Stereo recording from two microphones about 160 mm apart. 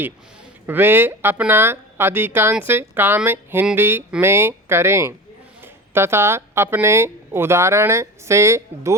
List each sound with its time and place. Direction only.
0.7 s speech: 15° right (ahead or behind)